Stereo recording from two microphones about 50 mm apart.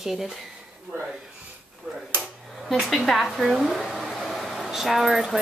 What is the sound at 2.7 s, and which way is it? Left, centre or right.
Speech, centre.